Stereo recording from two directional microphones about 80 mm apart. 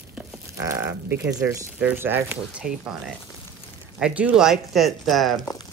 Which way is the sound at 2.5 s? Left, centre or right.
Centre.